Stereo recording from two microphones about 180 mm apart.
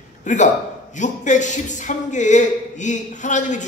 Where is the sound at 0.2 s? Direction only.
45° left (ahead or behind).